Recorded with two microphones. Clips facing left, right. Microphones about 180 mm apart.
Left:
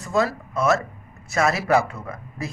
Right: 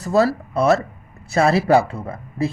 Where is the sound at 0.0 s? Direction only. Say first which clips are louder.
Right 5 dB; 35° right (ahead or behind).